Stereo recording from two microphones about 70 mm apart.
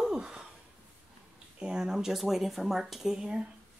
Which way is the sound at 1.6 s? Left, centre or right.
Centre.